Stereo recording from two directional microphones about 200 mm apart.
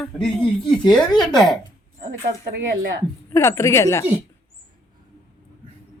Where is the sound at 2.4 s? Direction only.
45° right (ahead or behind).